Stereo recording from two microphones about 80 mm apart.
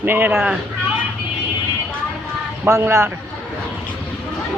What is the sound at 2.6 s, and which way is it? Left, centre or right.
Speech, right.